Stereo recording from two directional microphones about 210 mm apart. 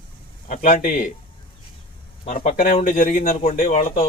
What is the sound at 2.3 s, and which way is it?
Speech, 30° left (ahead or behind).